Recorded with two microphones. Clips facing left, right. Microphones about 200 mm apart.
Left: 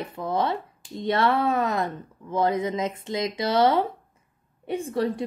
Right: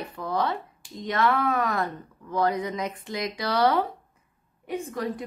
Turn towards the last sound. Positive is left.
turn(degrees=30)  # may be behind; listen again after turning